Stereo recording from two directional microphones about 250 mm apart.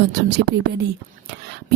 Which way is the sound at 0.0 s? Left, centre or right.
Right.